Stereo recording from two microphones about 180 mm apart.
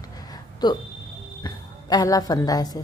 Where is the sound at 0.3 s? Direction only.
25° left (ahead or behind).